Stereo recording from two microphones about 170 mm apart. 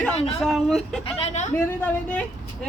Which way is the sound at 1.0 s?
35° left (ahead or behind).